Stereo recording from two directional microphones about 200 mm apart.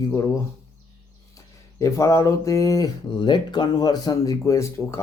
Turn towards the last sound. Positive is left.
turn(degrees=15)  # may be behind; listen again after turning